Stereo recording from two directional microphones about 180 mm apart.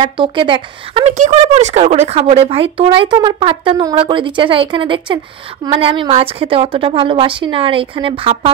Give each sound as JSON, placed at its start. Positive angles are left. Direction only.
{"t": 0.0, "sound": "speech", "side_deg": -25}
{"t": 1.1, "sound": "speech", "side_deg": -40}